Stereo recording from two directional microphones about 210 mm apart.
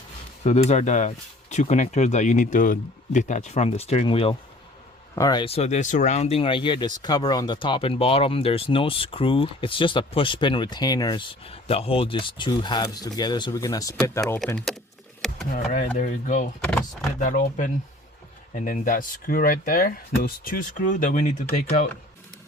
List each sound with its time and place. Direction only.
0.4 s speech: 35° left (ahead or behind); by 14.8 s centre (ahead or behind)
15.5 s speech: 40° left (ahead or behind)
16.6 s speech: 5° left (ahead or behind)
17.2 s speech: 40° left (ahead or behind)